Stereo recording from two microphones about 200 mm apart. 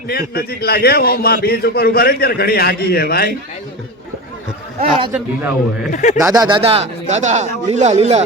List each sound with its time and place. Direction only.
0.1 s a man's voice: 50° left (ahead or behind)
5.1 s a man's voice: 10° right (ahead or behind)
5.9 s speech: 40° left (ahead or behind)
6.1 s a man's voice: 15° right (ahead or behind); by 8.2 s 35° right (ahead or behind)